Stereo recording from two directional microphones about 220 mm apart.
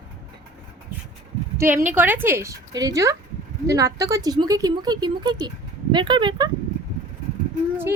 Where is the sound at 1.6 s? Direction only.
10° right (ahead or behind).